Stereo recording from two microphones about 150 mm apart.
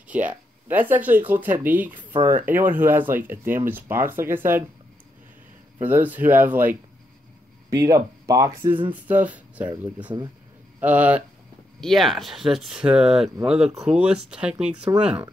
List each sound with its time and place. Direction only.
0.1 s speech: 10° right (ahead or behind)
5.8 s speech: 10° right (ahead or behind)
9.0 s speech: 10° right (ahead or behind)
10.8 s speech: 10° right (ahead or behind)
11.8 s speech: centre (ahead or behind)